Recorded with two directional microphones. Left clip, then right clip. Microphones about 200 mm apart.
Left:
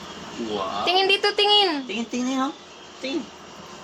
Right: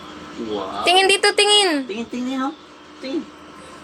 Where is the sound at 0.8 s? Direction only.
25° right (ahead or behind).